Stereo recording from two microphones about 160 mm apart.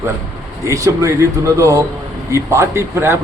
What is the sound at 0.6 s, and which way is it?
A man's voice, 20° right (ahead or behind).